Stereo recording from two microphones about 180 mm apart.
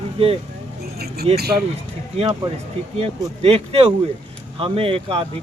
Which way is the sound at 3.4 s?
35° right (ahead or behind).